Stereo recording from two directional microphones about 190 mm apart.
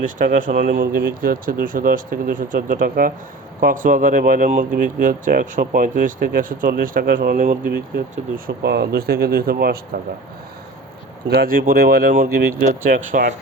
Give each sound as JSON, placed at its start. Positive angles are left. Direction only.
{"t": 0.0, "sound": "speech", "side_deg": -45}
{"t": 11.3, "sound": "speech", "side_deg": -50}